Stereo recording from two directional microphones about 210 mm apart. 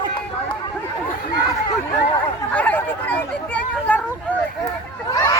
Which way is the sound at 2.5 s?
5° left (ahead or behind).